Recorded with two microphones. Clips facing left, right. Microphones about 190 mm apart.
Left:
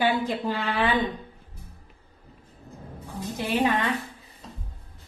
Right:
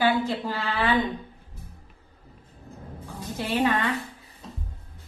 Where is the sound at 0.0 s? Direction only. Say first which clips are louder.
Right 1 dB; 15° left (ahead or behind).